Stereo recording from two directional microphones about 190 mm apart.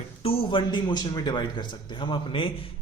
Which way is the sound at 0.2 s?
30° left (ahead or behind).